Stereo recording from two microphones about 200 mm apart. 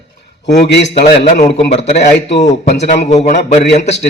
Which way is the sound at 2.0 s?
60° left (ahead or behind).